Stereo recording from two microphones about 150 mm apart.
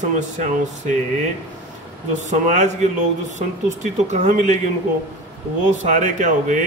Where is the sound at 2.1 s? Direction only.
50° right (ahead or behind).